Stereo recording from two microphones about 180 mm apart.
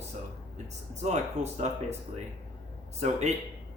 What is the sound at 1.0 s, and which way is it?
Speech, 40° right (ahead or behind).